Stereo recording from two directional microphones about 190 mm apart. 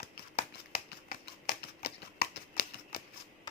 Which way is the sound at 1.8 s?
55° left (ahead or behind).